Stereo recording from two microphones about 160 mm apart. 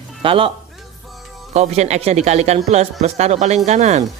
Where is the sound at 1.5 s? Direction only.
45° right (ahead or behind).